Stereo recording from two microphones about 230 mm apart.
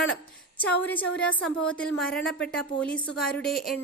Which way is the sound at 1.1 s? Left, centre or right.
Centre.